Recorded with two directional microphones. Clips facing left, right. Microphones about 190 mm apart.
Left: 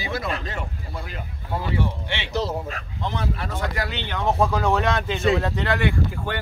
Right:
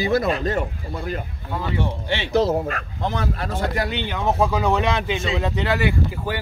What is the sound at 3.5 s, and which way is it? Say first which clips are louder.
Speech: right 4 dB; 30° right (ahead or behind).